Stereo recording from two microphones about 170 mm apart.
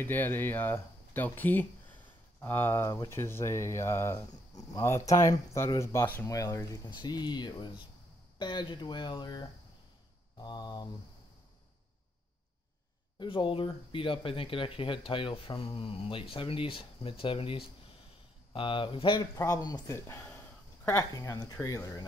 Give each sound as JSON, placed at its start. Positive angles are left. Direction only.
{"t": 0.0, "sound": "speech", "side_deg": 10}
{"t": 13.2, "sound": "speech", "side_deg": 30}
{"t": 19.3, "sound": "speech", "side_deg": 20}